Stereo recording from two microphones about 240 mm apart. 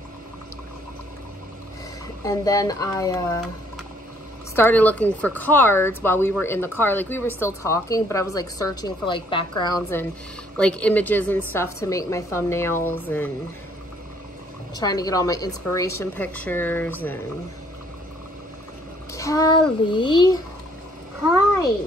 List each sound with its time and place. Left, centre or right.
2.2 s a woman's voice: centre
4.6 s a woman's voice: centre
10.6 s a woman's voice: centre
14.8 s a woman's voice: centre
19.1 s a child's voice: centre